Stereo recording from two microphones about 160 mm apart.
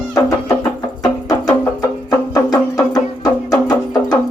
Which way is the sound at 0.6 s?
25° left (ahead or behind).